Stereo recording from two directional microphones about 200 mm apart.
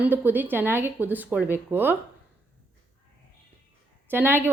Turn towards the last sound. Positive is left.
turn(degrees=-10)  # may be behind; listen again after turning